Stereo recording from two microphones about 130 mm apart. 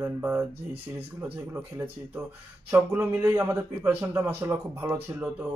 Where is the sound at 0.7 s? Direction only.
50° right (ahead or behind).